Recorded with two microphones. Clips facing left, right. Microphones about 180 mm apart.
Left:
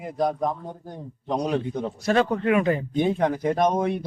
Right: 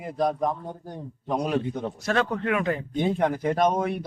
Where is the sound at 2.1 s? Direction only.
5° left (ahead or behind).